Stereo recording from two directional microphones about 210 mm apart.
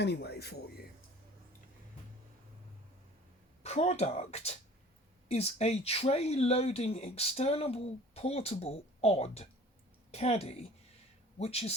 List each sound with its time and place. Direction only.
0.0 s speech: 50° left (ahead or behind)
3.6 s speech: 30° left (ahead or behind)